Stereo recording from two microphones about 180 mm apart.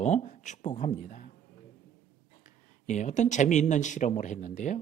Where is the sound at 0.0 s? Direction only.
40° left (ahead or behind).